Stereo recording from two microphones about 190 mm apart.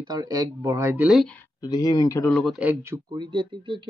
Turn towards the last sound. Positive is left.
turn(degrees=-25)  # may be behind; listen again after turning